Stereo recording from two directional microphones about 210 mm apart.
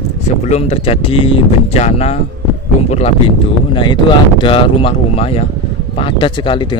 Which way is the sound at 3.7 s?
20° left (ahead or behind).